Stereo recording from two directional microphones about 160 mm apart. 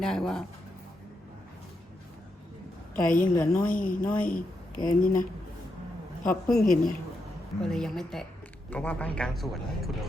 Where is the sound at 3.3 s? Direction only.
20° left (ahead or behind).